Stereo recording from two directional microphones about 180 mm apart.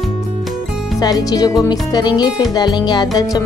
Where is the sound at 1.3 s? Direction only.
20° left (ahead or behind).